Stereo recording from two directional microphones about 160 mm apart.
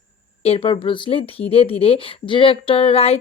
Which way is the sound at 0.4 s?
35° left (ahead or behind).